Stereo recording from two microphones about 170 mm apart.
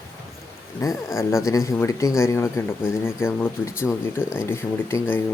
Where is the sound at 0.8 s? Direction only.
15° left (ahead or behind).